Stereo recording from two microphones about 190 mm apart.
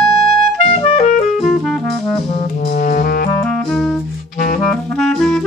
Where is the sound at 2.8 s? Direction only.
50° left (ahead or behind).